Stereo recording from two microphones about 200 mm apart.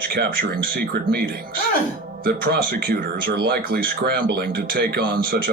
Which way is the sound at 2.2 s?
50° right (ahead or behind).